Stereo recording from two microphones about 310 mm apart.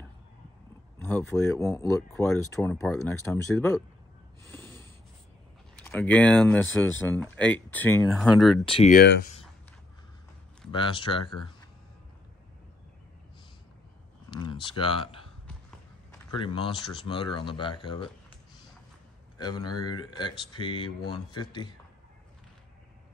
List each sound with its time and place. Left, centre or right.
0.9 s speech: centre
4.4 s snort: centre
5.8 s speech: centre
8.6 s speech: left
10.7 s speech: centre
14.3 s speech: centre
19.3 s speech: centre